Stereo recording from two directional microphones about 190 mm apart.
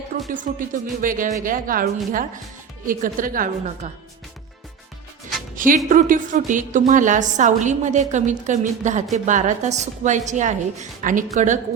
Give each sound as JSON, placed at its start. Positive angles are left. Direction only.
{"t": 0.3, "sound": "speech", "side_deg": -45}
{"t": 5.5, "sound": "a woman's voice", "side_deg": -45}